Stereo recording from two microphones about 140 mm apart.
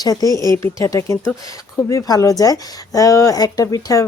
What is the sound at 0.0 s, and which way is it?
Speech, 25° left (ahead or behind).